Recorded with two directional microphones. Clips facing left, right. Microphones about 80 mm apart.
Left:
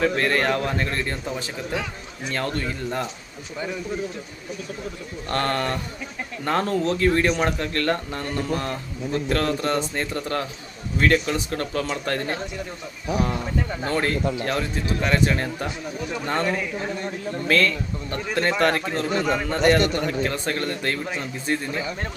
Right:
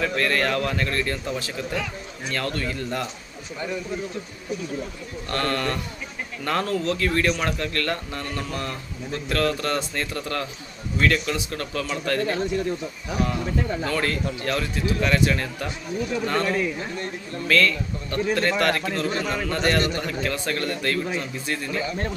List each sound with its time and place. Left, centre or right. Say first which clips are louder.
0.0 s speech: left 2 dB; left
5.3 s speech: left 1 dB; left
13.8 s speech: left 2 dB; left